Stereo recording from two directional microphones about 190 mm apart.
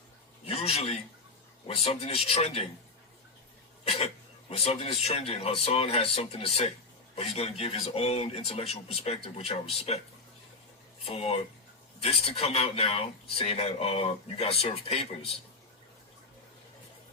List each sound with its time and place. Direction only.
0.4 s a sound: 30° left (ahead or behind)
1.6 s a man's voice: 30° left (ahead or behind)
3.8 s a man's voice: 30° left (ahead or behind)
11.0 s a man's voice: 30° left (ahead or behind)